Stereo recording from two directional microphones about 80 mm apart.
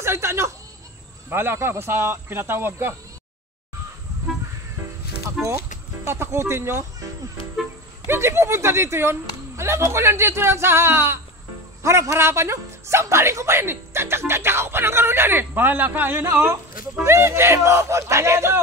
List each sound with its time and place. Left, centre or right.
0.0 s speech: right
5.4 s music: centre
6.0 s a man's voice: right
8.1 s a man's voice: right